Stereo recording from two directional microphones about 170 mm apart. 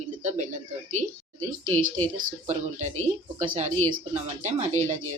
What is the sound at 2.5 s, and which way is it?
Speech, 45° right (ahead or behind).